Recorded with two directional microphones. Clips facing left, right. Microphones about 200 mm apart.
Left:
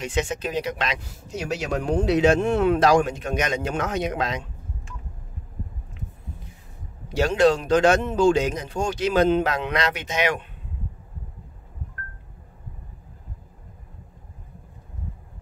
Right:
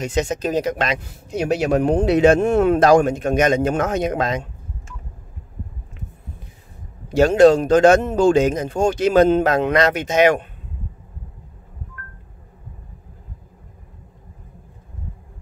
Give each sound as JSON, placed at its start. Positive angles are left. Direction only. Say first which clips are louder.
{"t": 0.0, "sound": "speech", "louder": "right 5 dB", "side_deg": -40}
{"t": 7.1, "sound": "speech", "louder": "right 7 dB", "side_deg": -50}